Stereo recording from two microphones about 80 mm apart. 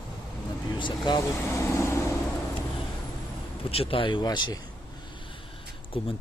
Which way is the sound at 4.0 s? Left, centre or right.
Left.